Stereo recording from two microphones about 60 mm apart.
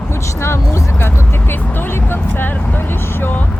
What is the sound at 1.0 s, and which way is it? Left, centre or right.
Vehicle, left.